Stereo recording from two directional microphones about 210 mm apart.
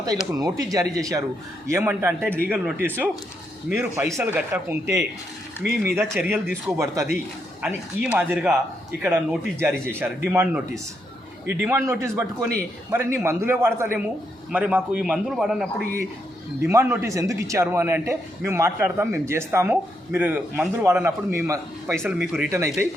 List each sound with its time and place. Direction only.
0.3 s a man's voice: 15° right (ahead or behind)
6.1 s a man's voice: centre (ahead or behind)
6.7 s a man's voice: 15° right (ahead or behind)
16.6 s a man's voice: 15° right (ahead or behind)